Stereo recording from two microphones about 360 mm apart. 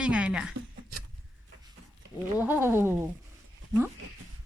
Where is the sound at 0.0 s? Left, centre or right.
Centre.